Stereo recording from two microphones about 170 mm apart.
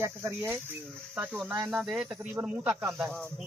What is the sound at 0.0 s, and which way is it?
A man's voice, 15° right (ahead or behind).